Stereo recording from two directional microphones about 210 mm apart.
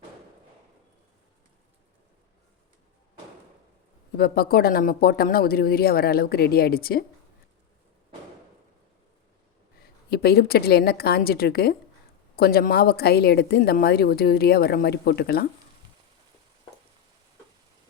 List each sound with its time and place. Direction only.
4.2 s speech: 45° left (ahead or behind)
9.8 s speech: 50° left (ahead or behind)